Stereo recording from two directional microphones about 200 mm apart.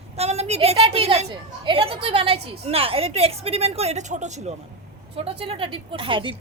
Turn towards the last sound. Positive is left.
turn(degrees=-25)  # may be behind; listen again after turning